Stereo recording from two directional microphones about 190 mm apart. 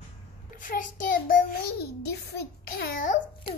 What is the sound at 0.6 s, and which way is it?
Child singing, 45° left (ahead or behind).